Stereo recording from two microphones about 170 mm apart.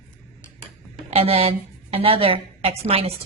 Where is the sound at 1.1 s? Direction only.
35° right (ahead or behind).